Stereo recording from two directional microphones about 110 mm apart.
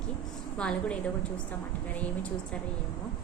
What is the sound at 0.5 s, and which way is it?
A woman's voice, 10° left (ahead or behind).